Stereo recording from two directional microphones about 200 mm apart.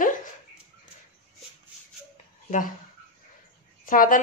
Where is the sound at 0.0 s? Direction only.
40° left (ahead or behind).